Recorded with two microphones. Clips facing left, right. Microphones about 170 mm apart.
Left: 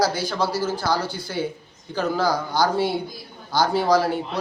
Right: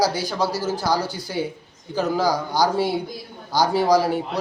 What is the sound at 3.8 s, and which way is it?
Speech, 15° right (ahead or behind).